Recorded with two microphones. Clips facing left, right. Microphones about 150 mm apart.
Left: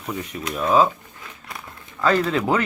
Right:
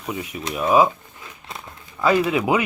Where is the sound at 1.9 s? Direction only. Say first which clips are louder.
Right 1 dB; 10° right (ahead or behind).